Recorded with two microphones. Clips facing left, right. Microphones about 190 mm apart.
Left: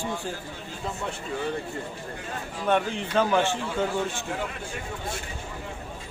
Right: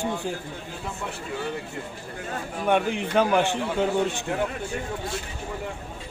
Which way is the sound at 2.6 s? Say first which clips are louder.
Right 2 dB; 15° right (ahead or behind).